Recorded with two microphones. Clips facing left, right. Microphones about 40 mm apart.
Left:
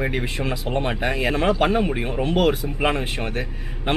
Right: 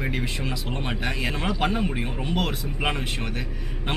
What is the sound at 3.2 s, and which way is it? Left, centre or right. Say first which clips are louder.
Speech: left 4 dB; left.